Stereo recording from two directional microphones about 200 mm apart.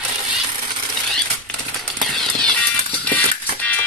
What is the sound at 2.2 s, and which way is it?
Music, 5° left (ahead or behind).